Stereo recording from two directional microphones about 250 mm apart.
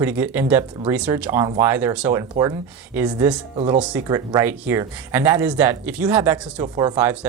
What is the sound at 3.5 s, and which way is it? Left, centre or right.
Speech, right.